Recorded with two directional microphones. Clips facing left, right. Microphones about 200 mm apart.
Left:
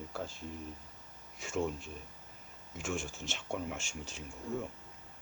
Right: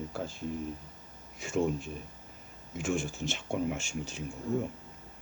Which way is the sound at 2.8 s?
5° right (ahead or behind).